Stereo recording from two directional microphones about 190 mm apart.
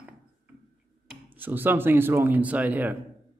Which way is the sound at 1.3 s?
10° right (ahead or behind).